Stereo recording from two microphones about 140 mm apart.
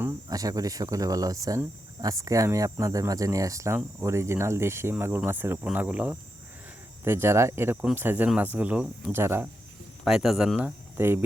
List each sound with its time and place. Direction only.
0.3 s speech: 25° right (ahead or behind)
10.0 s speech: 5° right (ahead or behind)